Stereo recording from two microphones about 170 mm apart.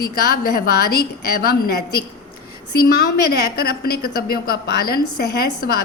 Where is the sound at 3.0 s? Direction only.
70° left (ahead or behind).